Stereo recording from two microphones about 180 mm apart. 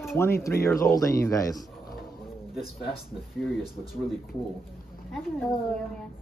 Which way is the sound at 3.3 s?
Centre (ahead or behind).